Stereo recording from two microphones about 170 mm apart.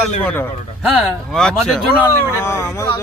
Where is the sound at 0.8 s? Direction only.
Centre (ahead or behind).